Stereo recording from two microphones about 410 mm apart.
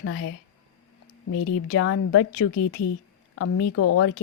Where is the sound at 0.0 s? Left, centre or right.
Left.